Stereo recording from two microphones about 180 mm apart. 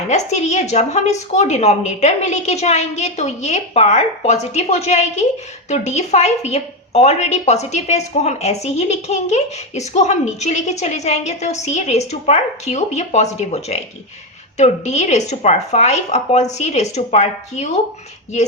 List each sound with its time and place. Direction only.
0.1 s a woman's voice: 40° left (ahead or behind)